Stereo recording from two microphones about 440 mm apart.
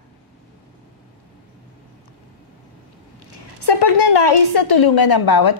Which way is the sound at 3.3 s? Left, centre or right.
Left.